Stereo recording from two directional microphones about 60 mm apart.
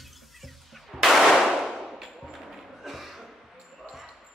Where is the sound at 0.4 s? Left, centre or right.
Centre.